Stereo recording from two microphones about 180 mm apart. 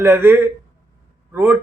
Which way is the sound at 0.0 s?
10° right (ahead or behind).